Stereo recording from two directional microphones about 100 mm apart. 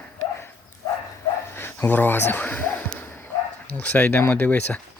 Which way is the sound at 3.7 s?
15° left (ahead or behind).